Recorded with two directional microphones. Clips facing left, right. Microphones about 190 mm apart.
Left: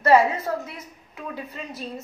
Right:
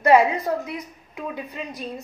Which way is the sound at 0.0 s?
15° right (ahead or behind).